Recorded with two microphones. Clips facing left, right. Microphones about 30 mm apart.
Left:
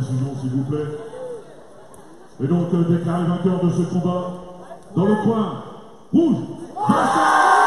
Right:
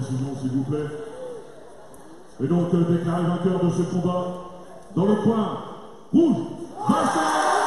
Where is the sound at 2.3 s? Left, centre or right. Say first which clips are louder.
Left 2 dB; centre.